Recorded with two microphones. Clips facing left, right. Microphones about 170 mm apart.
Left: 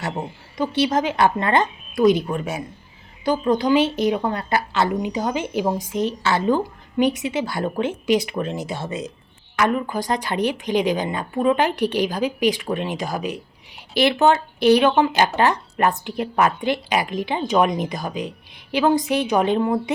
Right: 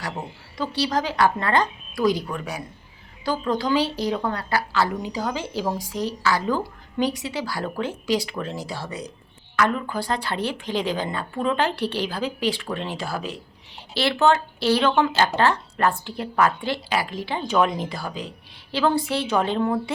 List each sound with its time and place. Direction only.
0.0 s a woman's voice: 20° left (ahead or behind)